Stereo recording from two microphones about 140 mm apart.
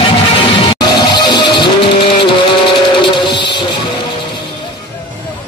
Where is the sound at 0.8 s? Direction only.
30° left (ahead or behind).